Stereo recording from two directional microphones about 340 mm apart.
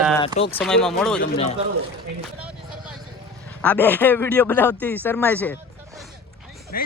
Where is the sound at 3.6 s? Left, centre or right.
Centre.